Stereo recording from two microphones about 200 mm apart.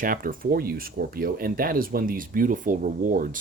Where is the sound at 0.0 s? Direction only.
45° right (ahead or behind).